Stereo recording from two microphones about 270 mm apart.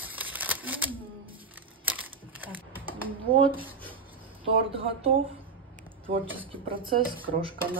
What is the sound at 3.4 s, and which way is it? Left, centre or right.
Speech, centre.